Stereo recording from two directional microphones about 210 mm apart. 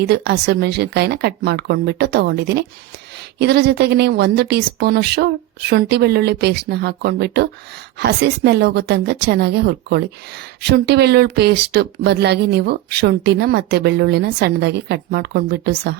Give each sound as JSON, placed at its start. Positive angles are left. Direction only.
{"t": 0.0, "sound": "speech", "side_deg": -50}